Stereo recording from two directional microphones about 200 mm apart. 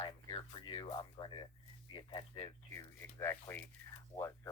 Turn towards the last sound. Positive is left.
turn(degrees=15)  # may be behind; listen again after turning